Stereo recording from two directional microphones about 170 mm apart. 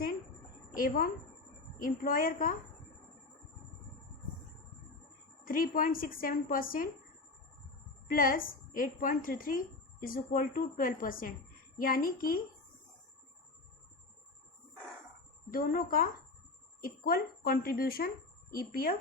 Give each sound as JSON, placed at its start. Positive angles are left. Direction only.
{"t": 0.8, "sound": "a woman's voice", "side_deg": 60}
{"t": 5.5, "sound": "a woman's voice", "side_deg": 55}
{"t": 8.1, "sound": "a woman's voice", "side_deg": 55}
{"t": 15.5, "sound": "a woman's voice", "side_deg": 55}